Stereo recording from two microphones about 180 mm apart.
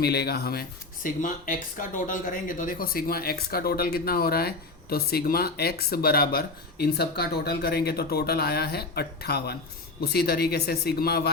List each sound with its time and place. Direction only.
0.0 s speech: 65° left (ahead or behind)
1.0 s speech: 50° left (ahead or behind)